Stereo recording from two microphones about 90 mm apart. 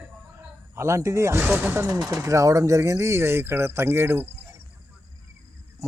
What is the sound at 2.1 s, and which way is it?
Speech, 35° right (ahead or behind).